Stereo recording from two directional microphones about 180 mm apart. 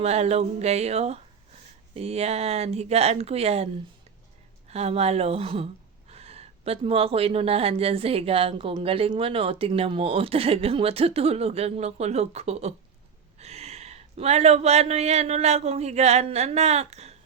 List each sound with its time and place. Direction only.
0.0 s speech: 35° right (ahead or behind)
4.7 s speech: 35° right (ahead or behind)